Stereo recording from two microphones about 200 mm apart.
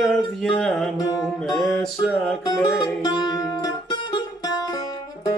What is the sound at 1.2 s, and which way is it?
Music, centre (ahead or behind).